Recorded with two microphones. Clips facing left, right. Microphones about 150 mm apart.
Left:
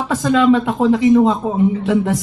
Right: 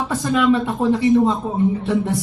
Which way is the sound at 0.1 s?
90° left.